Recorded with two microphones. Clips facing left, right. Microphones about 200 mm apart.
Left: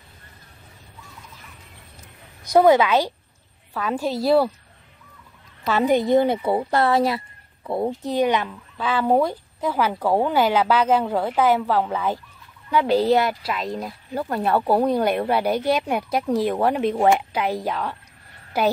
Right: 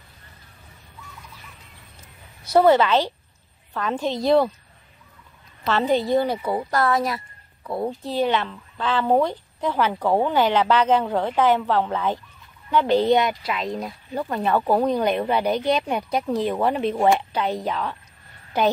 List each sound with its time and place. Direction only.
2.4 s speech: 15° left (ahead or behind)
5.6 s speech: 15° left (ahead or behind)